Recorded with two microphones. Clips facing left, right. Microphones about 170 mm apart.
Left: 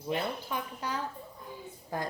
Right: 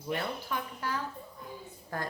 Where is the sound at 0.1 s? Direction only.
20° left (ahead or behind).